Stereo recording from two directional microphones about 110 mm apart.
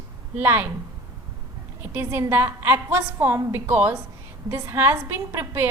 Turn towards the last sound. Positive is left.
turn(degrees=-25)  # may be behind; listen again after turning